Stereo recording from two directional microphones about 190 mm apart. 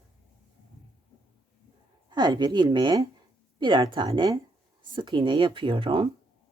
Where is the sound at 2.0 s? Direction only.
20° right (ahead or behind).